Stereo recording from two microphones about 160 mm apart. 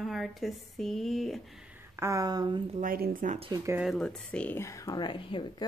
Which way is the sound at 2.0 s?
20° right (ahead or behind).